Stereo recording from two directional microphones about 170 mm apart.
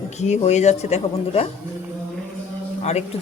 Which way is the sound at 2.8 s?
40° left (ahead or behind).